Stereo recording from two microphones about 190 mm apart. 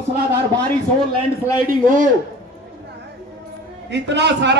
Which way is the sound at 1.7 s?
45° right (ahead or behind).